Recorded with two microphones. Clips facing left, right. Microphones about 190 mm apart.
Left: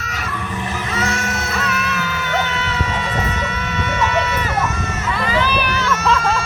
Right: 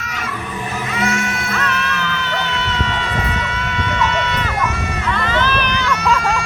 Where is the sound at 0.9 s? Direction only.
40° left (ahead or behind).